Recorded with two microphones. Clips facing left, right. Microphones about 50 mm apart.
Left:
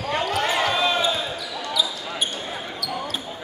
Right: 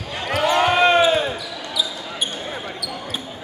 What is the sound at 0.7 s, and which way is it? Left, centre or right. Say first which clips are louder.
Basketball bounce: right 7 dB; right.